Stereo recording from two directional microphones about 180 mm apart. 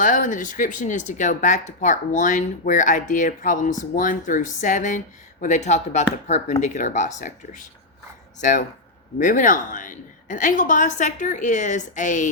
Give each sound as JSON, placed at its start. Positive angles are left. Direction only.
{"t": 0.0, "sound": "speech", "side_deg": 45}